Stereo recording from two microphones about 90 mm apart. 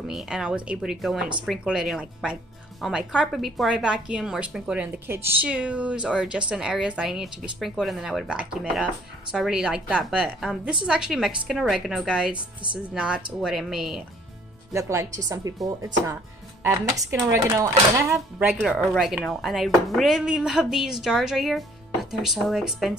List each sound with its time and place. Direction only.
0.1 s speech: 5° right (ahead or behind); by 5.5 s 25° right (ahead or behind)
5.5 s speech: 15° right (ahead or behind)
14.7 s speech: 35° right (ahead or behind)
18.8 s speech: 5° right (ahead or behind)